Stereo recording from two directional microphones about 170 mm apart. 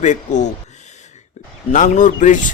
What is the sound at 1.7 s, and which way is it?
Speech, 45° left (ahead or behind).